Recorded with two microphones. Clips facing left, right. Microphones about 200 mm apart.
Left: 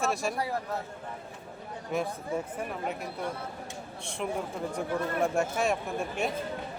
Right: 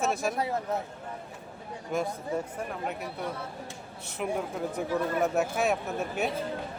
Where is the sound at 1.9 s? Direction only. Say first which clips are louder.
Right 1 dB; centre (ahead or behind).